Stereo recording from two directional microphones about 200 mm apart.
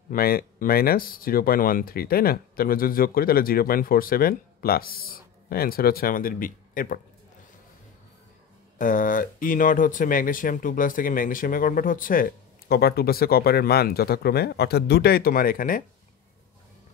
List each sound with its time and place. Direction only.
0.1 s speech: 50° left (ahead or behind)
8.7 s speech: 40° left (ahead or behind)